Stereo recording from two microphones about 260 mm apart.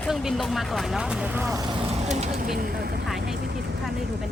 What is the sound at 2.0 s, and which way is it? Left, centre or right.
Speech, right.